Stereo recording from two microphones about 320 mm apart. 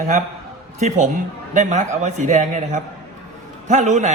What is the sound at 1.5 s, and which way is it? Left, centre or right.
A man's voice, right.